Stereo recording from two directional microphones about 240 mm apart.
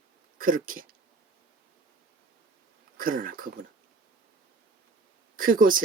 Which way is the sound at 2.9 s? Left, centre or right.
Right.